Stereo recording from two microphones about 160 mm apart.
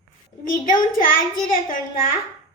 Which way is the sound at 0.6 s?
60° left (ahead or behind).